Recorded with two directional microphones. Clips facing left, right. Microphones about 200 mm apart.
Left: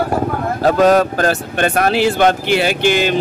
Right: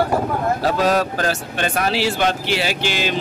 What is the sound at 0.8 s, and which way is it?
Speech, 55° left (ahead or behind).